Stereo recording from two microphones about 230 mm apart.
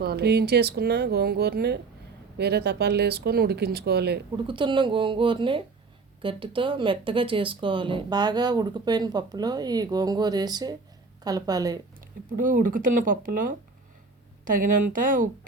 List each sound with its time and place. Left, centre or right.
0.0 s speech: right
4.4 s speech: right
11.9 s speech: right